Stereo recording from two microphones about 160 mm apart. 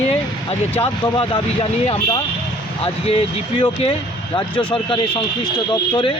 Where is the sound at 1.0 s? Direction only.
30° left (ahead or behind).